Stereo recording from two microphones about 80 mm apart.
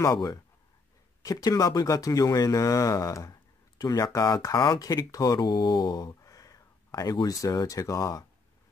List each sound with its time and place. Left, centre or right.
0.0 s speech: left
5.4 s a sound: left
7.2 s speech: left